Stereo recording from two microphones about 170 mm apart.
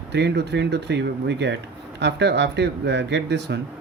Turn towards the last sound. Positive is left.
turn(degrees=-85)